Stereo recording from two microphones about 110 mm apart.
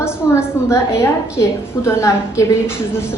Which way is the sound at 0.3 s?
25° left (ahead or behind).